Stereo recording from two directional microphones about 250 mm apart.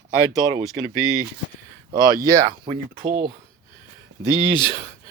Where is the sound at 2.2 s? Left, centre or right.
Centre.